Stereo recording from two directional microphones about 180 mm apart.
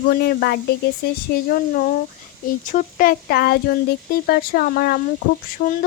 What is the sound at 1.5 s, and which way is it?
Speech, 50° left (ahead or behind).